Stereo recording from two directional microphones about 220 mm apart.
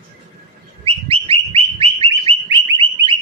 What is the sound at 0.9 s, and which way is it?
Bird, 25° right (ahead or behind).